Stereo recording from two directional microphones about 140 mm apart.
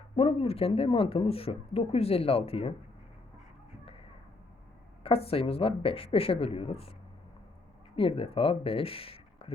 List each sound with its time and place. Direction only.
0.2 s speech: 45° left (ahead or behind)
5.0 s speech: 45° left (ahead or behind)
7.9 s speech: 40° left (ahead or behind)